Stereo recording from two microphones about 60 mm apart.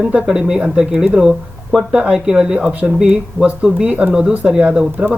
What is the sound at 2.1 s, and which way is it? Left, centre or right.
Speech, centre.